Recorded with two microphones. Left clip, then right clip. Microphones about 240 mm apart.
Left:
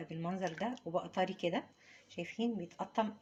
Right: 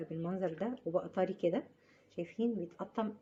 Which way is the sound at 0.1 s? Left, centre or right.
Left.